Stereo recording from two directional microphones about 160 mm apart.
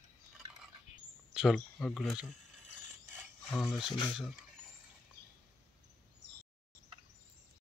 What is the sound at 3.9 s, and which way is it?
Speech, 30° left (ahead or behind).